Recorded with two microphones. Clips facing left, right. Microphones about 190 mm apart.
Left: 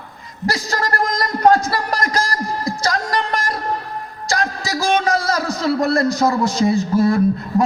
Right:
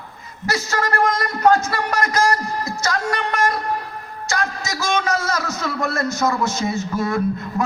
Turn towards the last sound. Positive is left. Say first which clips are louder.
# left 5 dB
turn(degrees=35)  # may be behind; listen again after turning